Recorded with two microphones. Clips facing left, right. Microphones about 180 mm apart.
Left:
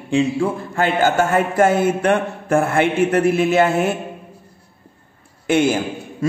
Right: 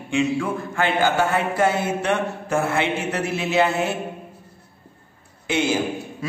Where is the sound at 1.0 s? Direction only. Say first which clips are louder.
Left 4 dB; 45° left (ahead or behind).